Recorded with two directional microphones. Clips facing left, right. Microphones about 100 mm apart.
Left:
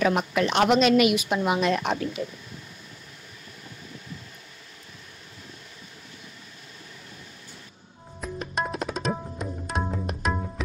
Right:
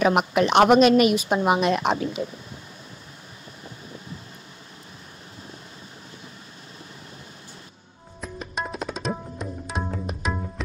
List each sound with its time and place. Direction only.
0.1 s speech: 70° right (ahead or behind)
0.5 s a woman's voice: 55° right (ahead or behind)
1.7 s speech: 25° right (ahead or behind)
8.2 s tabla: centre (ahead or behind)